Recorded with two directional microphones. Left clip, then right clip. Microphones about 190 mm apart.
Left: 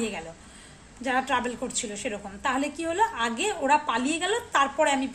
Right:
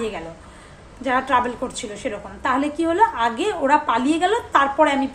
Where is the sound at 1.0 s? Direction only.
20° left (ahead or behind).